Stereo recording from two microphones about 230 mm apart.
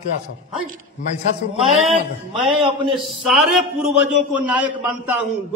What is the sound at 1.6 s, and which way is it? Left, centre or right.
Speech, right.